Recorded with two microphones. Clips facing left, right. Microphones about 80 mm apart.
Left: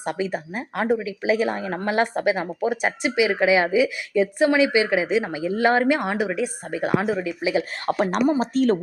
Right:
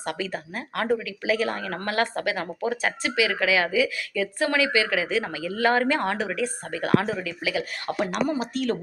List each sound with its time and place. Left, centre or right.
0.0 s speech: centre; by 8.8 s left